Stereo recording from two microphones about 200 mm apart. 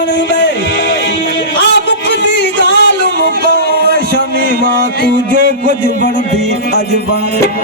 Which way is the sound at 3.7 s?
50° right (ahead or behind).